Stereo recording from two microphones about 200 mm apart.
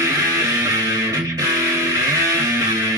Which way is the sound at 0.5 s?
15° right (ahead or behind).